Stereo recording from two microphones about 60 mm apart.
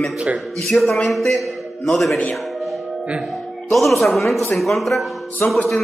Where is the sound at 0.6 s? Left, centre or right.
Centre.